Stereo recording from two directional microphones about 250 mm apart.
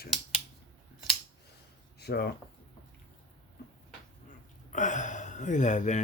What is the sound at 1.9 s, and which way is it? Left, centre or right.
Speech, left.